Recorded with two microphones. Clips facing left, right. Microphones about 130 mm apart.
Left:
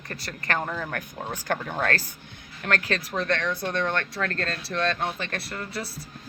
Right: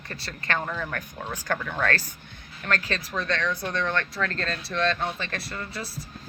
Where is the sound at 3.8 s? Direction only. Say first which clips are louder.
Even; 45° left (ahead or behind).